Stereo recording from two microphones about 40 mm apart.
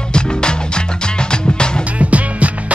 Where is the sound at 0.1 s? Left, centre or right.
Left.